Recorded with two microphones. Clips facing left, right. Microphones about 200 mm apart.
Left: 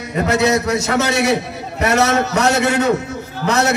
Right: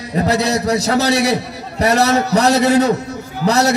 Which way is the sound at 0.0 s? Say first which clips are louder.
Even; 35° right (ahead or behind).